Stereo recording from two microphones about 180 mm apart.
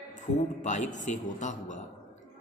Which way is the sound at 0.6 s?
40° left (ahead or behind).